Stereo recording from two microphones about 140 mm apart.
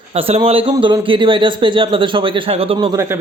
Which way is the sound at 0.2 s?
45° right (ahead or behind).